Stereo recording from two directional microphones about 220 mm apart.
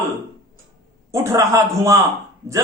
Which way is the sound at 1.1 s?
15° right (ahead or behind).